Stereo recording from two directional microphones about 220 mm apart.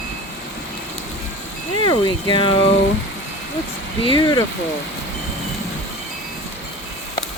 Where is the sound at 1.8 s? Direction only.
20° left (ahead or behind).